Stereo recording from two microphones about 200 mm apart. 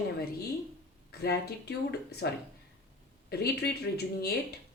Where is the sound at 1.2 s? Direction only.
55° left (ahead or behind).